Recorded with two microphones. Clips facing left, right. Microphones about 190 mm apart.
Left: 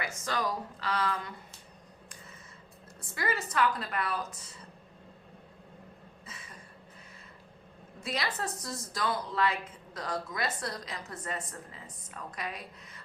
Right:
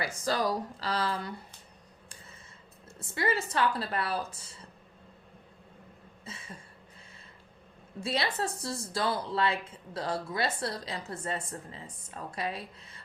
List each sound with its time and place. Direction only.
0.0 s speech: 35° right (ahead or behind)
3.0 s speech: 25° right (ahead or behind)
6.2 s a sound: 25° right (ahead or behind)
8.0 s a woman's voice: 30° right (ahead or behind)